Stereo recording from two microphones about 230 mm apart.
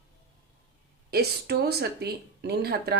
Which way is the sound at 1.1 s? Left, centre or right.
Right.